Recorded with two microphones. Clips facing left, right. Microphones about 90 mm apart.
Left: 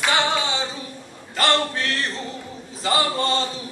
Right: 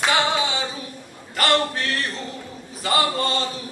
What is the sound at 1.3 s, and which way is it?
Male singing, 25° left (ahead or behind).